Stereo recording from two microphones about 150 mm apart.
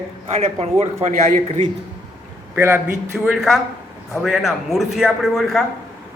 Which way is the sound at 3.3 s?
Centre (ahead or behind).